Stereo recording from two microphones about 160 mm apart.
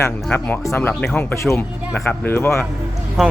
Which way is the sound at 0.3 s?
10° left (ahead or behind).